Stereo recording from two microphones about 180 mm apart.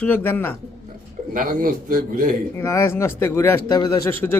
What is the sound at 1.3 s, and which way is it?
A man's voice, 50° right (ahead or behind).